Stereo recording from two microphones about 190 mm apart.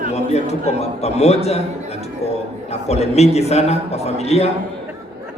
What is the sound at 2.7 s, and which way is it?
A man's voice, 35° left (ahead or behind).